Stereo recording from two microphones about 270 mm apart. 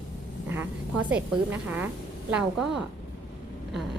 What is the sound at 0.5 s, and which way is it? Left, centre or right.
A woman's voice, centre.